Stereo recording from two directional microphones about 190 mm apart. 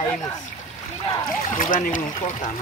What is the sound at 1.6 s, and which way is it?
Speech, 45° left (ahead or behind).